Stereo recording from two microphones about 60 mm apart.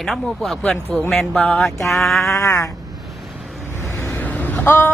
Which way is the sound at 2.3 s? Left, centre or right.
Left.